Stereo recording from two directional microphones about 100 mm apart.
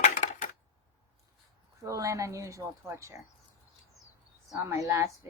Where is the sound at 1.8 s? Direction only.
35° right (ahead or behind).